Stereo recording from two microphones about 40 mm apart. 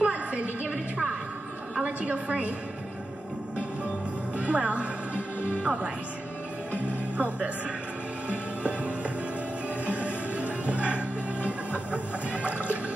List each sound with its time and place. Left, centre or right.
0.0 s a sound: right
1.8 s a woman's voice: right
4.4 s speech: right
7.2 s speech: right
8.3 s music: right